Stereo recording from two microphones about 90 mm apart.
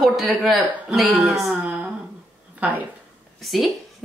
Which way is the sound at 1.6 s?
20° right (ahead or behind).